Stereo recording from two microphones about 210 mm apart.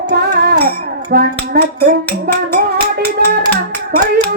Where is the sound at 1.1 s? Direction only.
45° right (ahead or behind).